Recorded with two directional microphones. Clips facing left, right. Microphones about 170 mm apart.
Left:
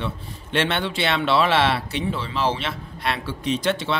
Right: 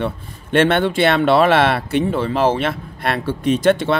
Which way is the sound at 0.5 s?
50° right (ahead or behind).